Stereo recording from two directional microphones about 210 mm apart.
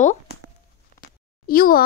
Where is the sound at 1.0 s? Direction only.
45° left (ahead or behind).